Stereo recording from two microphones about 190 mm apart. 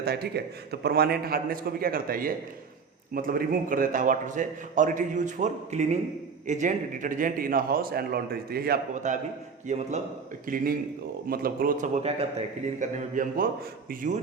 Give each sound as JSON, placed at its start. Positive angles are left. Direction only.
{"t": 0.0, "sound": "a man's voice", "side_deg": -55}
{"t": 9.0, "sound": "a man's voice", "side_deg": -40}
{"t": 10.4, "sound": "a man's voice", "side_deg": -50}